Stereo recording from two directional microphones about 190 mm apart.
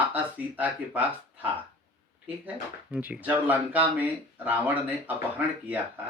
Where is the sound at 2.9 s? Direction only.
10° right (ahead or behind).